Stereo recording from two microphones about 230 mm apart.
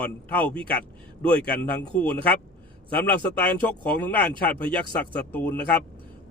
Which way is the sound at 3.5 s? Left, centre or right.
Centre.